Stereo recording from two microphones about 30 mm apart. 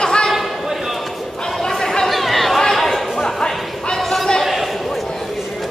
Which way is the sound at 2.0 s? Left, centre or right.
Centre.